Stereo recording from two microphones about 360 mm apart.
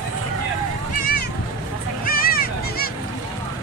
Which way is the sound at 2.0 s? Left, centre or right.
Left.